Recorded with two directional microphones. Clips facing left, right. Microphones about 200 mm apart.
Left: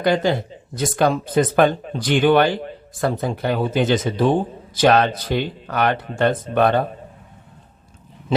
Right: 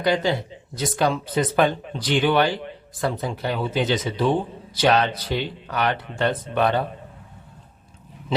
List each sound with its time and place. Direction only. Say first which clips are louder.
0.0 s speech: left 3 dB; 50° left (ahead or behind)